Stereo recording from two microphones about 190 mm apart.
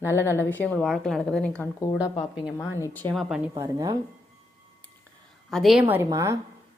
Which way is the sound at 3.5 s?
20° right (ahead or behind).